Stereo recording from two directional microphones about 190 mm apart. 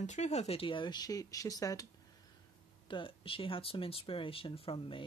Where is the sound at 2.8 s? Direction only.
25° left (ahead or behind).